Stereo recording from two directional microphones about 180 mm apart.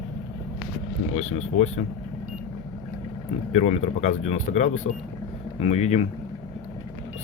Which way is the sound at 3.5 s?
35° left (ahead or behind).